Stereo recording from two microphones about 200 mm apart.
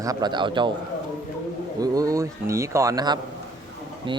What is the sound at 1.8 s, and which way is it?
Speech, 15° right (ahead or behind).